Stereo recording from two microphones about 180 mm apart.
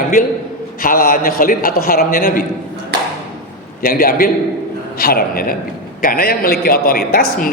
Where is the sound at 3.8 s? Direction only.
55° left (ahead or behind).